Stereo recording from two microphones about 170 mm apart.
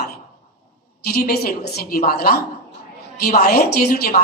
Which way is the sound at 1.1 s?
55° left (ahead or behind).